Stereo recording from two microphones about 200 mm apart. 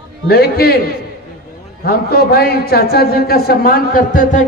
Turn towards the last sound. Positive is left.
turn(degrees=40)  # may be behind; listen again after turning